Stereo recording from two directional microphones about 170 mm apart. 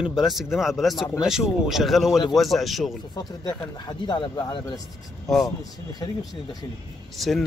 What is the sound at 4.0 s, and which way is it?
Speech, 25° left (ahead or behind).